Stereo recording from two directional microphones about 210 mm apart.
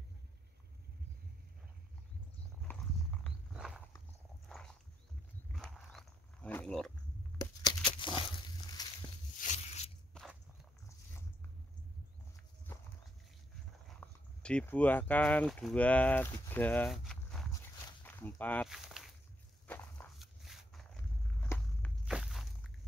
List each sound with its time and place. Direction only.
2.7 s horse: 10° left (ahead or behind)
3.3 s a sound: centre (ahead or behind)
4.5 s walk: 5° left (ahead or behind)
5.5 s dog: centre (ahead or behind)
7.3 s a sound: 20° left (ahead or behind)
9.4 s a sound: 35° left (ahead or behind)
10.1 s biting: centre (ahead or behind)
13.8 s speech: 5° left (ahead or behind)
18.0 s walk: 10° left (ahead or behind)